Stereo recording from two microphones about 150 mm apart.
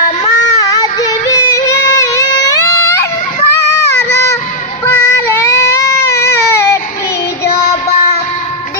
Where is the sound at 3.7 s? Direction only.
15° left (ahead or behind).